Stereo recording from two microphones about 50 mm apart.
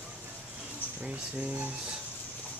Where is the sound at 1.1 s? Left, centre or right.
Right.